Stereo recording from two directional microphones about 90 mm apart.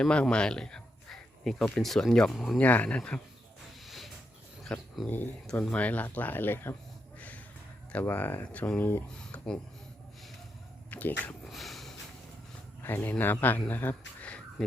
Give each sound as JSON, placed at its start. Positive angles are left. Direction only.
{"t": 0.0, "sound": "speech", "side_deg": 10}
{"t": 2.6, "sound": "speech", "side_deg": 15}
{"t": 3.8, "sound": "a sound", "side_deg": 0}
{"t": 4.7, "sound": "speech", "side_deg": 10}
{"t": 5.0, "sound": "speech", "side_deg": 20}
{"t": 7.2, "sound": "a sound", "side_deg": 15}
{"t": 7.9, "sound": "speech", "side_deg": 20}
{"t": 10.9, "sound": "speech", "side_deg": 15}
{"t": 11.4, "sound": "snort", "side_deg": 0}
{"t": 12.8, "sound": "speech", "side_deg": 25}